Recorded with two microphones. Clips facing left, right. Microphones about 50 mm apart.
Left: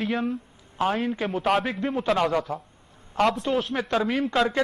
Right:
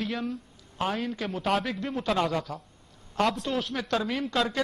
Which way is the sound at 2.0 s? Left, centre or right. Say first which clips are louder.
Left 3 dB; centre.